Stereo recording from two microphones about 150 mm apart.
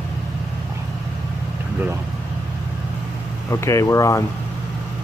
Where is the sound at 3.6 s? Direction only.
20° left (ahead or behind).